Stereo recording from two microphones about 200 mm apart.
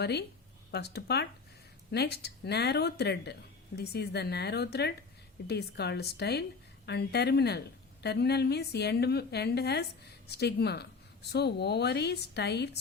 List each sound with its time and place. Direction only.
0.0 s a woman's voice: 55° left (ahead or behind)